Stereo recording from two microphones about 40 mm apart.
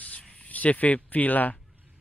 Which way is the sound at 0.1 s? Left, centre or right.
Left.